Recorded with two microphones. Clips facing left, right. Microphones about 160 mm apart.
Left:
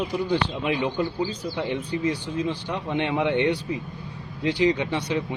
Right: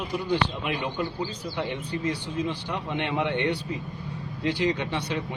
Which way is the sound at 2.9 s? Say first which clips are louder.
Left 4 dB; 20° left (ahead or behind).